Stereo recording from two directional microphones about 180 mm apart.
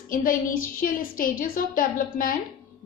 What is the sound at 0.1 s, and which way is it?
A woman's voice, 50° left (ahead or behind).